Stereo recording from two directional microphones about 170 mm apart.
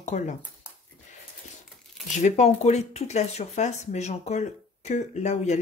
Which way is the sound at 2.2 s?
40° left (ahead or behind).